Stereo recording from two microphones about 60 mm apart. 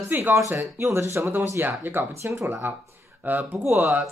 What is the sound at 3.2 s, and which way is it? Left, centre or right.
Speech, right.